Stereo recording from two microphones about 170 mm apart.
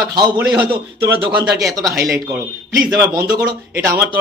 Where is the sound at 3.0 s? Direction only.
15° right (ahead or behind).